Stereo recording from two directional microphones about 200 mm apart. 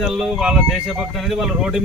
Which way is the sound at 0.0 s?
Centre (ahead or behind).